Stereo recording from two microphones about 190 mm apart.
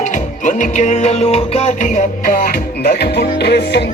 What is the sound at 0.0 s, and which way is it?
Music, 40° left (ahead or behind).